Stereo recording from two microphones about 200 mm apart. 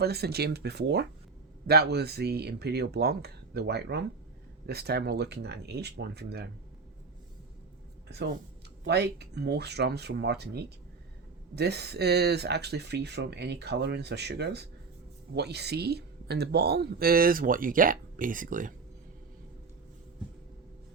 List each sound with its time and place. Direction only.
0.0 s speech: 55° right (ahead or behind)
8.0 s speech: 55° right (ahead or behind)